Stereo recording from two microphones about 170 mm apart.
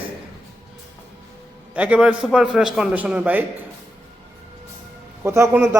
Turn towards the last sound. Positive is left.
turn(degrees=-15)  # may be behind; listen again after turning